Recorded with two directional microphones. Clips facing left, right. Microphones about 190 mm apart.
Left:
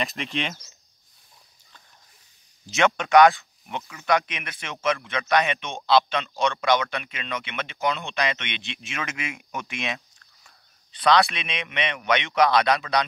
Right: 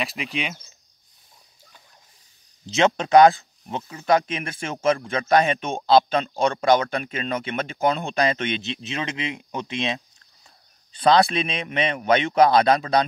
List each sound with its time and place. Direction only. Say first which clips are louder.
0.0 s speech: even; centre (ahead or behind)
2.7 s speech: right 2 dB; 35° right (ahead or behind)